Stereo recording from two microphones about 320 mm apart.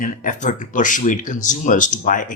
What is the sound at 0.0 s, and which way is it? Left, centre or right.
Speech, left.